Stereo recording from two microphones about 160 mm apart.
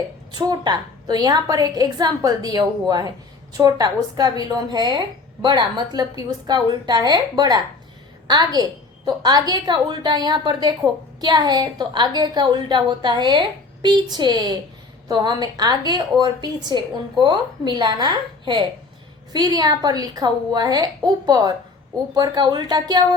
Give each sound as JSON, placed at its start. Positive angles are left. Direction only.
{"t": 0.3, "sound": "a woman's voice", "side_deg": -25}